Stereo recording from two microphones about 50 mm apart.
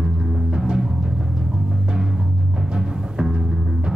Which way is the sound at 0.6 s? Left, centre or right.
Centre.